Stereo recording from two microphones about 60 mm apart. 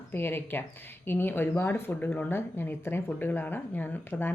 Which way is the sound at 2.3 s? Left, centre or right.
Left.